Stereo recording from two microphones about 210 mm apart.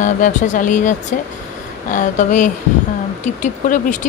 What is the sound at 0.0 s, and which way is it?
Speech, 35° left (ahead or behind).